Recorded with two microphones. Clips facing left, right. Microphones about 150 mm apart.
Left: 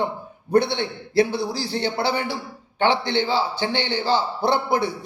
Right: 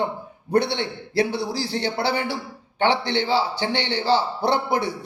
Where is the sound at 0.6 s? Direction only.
15° left (ahead or behind).